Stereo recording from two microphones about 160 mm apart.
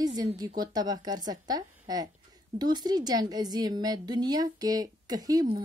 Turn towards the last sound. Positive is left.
turn(degrees=-25)  # may be behind; listen again after turning